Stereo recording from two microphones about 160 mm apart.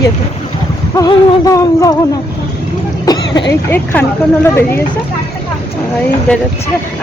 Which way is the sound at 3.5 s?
10° left (ahead or behind).